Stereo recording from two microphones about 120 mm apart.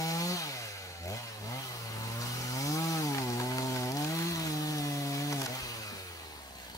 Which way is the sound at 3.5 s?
25° left (ahead or behind).